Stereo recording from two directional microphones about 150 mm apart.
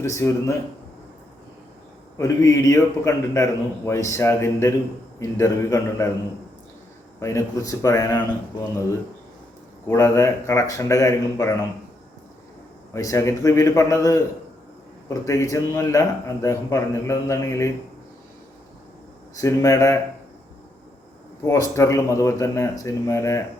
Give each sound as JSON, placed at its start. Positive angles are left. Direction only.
{"t": 0.0, "sound": "a man's voice", "side_deg": 20}
{"t": 2.1, "sound": "a man's voice", "side_deg": 20}
{"t": 7.2, "sound": "a man's voice", "side_deg": 20}
{"t": 9.9, "sound": "a man's voice", "side_deg": 20}
{"t": 12.9, "sound": "a man's voice", "side_deg": 20}
{"t": 19.4, "sound": "a man's voice", "side_deg": 20}
{"t": 21.4, "sound": "a man's voice", "side_deg": 20}